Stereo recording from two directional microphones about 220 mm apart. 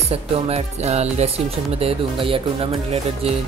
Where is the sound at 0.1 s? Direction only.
30° right (ahead or behind).